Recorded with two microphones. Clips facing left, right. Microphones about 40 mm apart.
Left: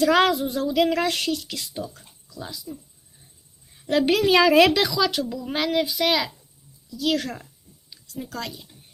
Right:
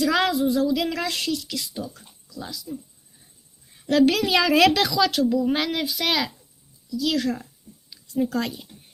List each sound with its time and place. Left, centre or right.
0.0 s a woman's voice: left
1.9 s a sound: left
2.5 s a woman's voice: left
3.8 s a woman's voice: centre
4.1 s a woman's voice: left
4.7 s speech: centre
6.9 s a woman's voice: left
8.3 s speech: right